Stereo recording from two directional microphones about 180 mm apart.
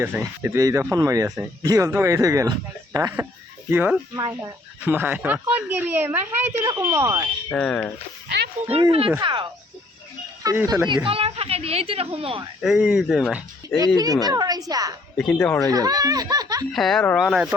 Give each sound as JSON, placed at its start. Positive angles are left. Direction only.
{"t": 0.0, "sound": "speech", "side_deg": -15}
{"t": 6.7, "sound": "speech", "side_deg": -25}
{"t": 7.5, "sound": "speech", "side_deg": 5}
{"t": 8.7, "sound": "speech", "side_deg": -30}
{"t": 10.8, "sound": "speech", "side_deg": -25}
{"t": 12.6, "sound": "speech", "side_deg": -5}
{"t": 13.7, "sound": "speech", "side_deg": -20}
{"t": 15.2, "sound": "speech", "side_deg": 5}
{"t": 15.7, "sound": "speech", "side_deg": -20}
{"t": 16.7, "sound": "speech", "side_deg": 0}